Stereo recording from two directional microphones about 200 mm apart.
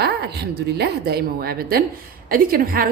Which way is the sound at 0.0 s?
55° right (ahead or behind).